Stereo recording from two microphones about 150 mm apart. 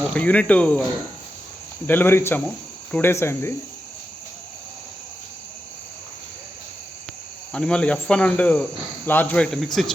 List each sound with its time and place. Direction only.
0.1 s cricket: 10° left (ahead or behind)
1.9 s cricket: 15° left (ahead or behind)
7.5 s cricket: 5° left (ahead or behind)
9.0 s speech: 10° left (ahead or behind)